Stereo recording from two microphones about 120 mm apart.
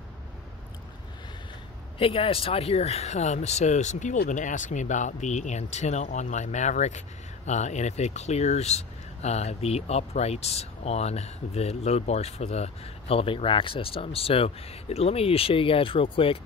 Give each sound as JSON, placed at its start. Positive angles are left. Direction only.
{"t": 2.0, "sound": "speech", "side_deg": 50}